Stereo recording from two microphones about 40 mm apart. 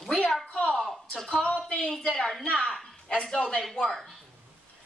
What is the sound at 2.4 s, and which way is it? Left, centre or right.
A woman's voice, left.